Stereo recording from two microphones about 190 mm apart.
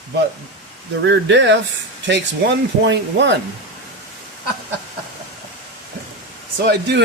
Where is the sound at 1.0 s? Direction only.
70° right (ahead or behind).